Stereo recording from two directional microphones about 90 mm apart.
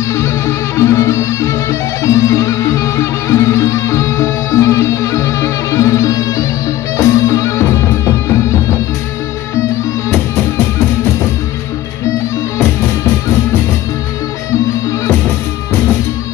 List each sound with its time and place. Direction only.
0.1 s music: 35° left (ahead or behind)